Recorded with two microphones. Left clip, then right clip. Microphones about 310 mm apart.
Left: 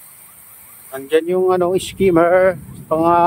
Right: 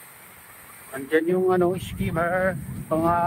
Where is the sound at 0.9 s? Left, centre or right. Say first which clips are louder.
Left 6 dB; left.